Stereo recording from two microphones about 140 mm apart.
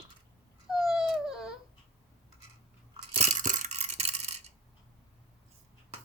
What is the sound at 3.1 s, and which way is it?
Toothbrush, 60° right (ahead or behind).